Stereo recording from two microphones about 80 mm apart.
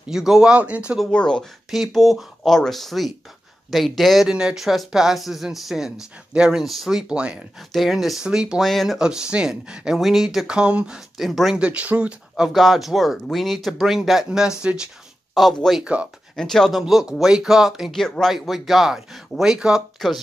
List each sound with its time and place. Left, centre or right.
0.1 s speech: centre
1.1 s speech: centre
11.1 s speech: centre
11.5 s speech: centre
12.4 s speech: centre
15.3 s speech: centre
15.8 s speech: centre
16.3 s speech: centre
16.8 s speech: centre